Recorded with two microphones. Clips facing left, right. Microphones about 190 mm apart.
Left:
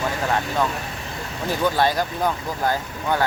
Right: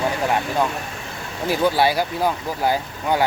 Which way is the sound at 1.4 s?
10° right (ahead or behind).